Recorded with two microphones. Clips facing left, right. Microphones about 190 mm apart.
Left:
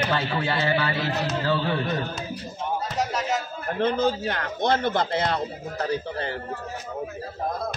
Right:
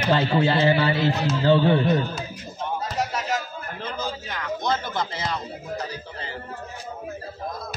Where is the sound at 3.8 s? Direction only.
60° left (ahead or behind).